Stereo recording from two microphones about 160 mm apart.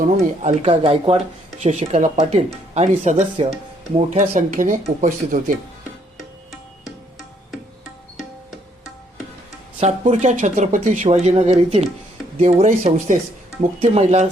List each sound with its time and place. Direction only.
0.0 s speech: 45° right (ahead or behind)
9.8 s speech: 45° right (ahead or behind)
13.6 s speech: 40° right (ahead or behind)